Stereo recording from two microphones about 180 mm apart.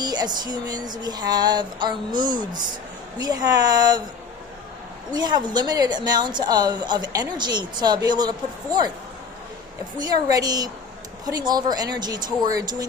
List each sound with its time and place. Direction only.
0.0 s a woman's voice: 20° right (ahead or behind)
5.1 s a woman's voice: 25° right (ahead or behind)
10.0 s a woman's voice: 20° right (ahead or behind)